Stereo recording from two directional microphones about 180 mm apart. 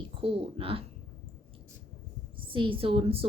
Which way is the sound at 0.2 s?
30° right (ahead or behind).